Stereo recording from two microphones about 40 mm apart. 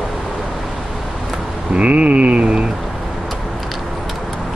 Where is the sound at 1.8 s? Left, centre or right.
Right.